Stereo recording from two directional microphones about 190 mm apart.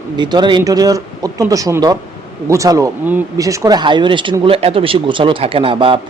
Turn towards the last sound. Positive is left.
turn(degrees=-25)  # may be behind; listen again after turning